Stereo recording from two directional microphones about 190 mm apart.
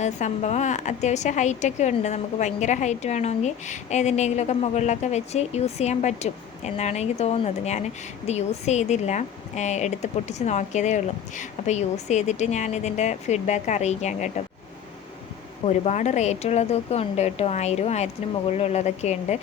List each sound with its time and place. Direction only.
0.0 s a woman's voice: 35° left (ahead or behind)
15.6 s a woman's voice: 35° left (ahead or behind)